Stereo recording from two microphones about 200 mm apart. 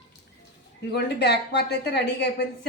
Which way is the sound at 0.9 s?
55° left (ahead or behind).